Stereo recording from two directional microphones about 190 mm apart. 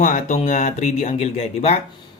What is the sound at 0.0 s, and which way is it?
Speech, 40° left (ahead or behind).